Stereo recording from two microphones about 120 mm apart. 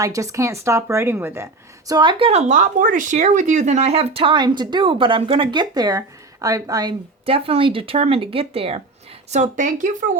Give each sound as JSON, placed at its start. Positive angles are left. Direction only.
{"t": 0.0, "sound": "a woman's voice", "side_deg": -25}
{"t": 1.9, "sound": "speech", "side_deg": -40}
{"t": 7.3, "sound": "speech", "side_deg": -50}
{"t": 9.3, "sound": "speech", "side_deg": -80}